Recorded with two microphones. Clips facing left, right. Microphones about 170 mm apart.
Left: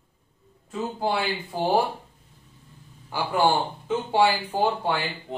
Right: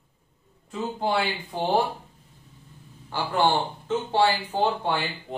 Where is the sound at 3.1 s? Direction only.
10° left (ahead or behind).